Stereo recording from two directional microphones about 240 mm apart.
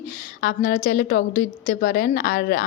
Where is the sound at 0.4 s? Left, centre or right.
Left.